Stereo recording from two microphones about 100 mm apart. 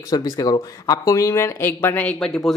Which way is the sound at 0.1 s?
40° left (ahead or behind).